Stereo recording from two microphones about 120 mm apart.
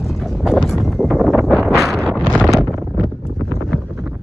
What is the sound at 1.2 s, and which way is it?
Wind noise, centre (ahead or behind).